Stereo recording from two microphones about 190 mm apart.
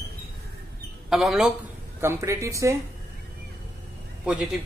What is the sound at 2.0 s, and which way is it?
Speech, 15° right (ahead or behind).